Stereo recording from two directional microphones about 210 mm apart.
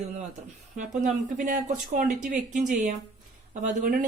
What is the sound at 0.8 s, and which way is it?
Speech, 35° right (ahead or behind).